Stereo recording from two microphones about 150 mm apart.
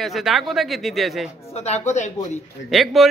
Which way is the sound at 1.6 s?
45° left (ahead or behind).